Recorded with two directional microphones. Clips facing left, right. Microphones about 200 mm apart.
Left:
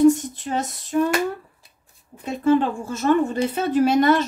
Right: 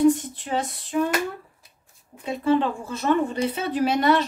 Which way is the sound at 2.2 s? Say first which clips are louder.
Left 3 dB; 45° left (ahead or behind).